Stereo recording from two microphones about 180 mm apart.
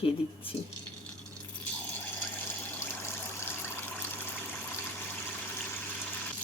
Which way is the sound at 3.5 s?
10° left (ahead or behind).